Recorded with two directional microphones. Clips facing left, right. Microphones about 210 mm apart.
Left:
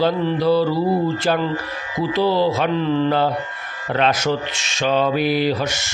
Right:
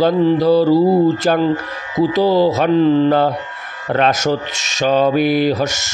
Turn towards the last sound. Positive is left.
turn(degrees=-40)  # may be behind; listen again after turning